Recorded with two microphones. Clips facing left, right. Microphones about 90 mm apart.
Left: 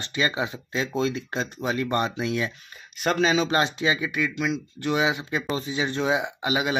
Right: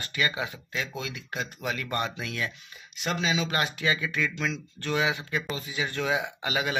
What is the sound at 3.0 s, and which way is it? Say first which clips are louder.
Speech: left 7 dB; 45° left (ahead or behind).